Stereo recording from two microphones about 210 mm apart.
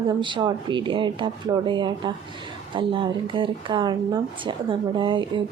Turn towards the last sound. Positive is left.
turn(degrees=-25)  # may be behind; listen again after turning